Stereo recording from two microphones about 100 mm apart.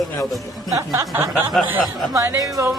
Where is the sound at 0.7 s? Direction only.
35° right (ahead or behind).